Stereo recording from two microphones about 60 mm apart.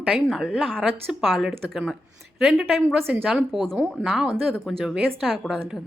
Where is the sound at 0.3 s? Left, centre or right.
Centre.